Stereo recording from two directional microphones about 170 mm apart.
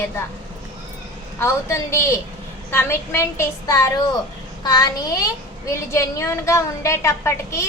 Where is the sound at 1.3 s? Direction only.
15° left (ahead or behind).